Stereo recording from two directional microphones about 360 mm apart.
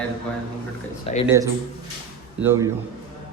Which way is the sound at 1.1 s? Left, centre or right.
Centre.